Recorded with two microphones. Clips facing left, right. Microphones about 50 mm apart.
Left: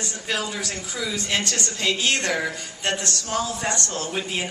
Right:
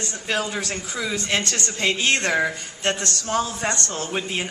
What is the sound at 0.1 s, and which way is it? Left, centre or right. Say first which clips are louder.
Speech: right 3 dB; right.